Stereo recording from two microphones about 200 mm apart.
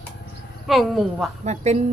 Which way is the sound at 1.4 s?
35° right (ahead or behind).